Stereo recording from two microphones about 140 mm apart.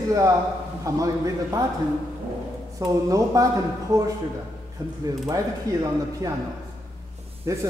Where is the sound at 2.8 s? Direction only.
25° right (ahead or behind).